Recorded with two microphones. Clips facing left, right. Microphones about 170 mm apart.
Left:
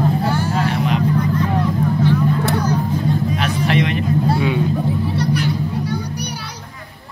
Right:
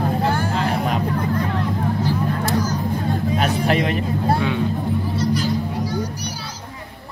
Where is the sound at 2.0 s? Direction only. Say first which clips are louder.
Left 5 dB; 65° left (ahead or behind).